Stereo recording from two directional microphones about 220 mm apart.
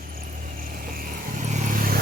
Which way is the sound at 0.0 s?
40° right (ahead or behind).